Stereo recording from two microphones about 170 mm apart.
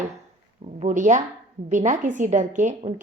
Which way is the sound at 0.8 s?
45° right (ahead or behind).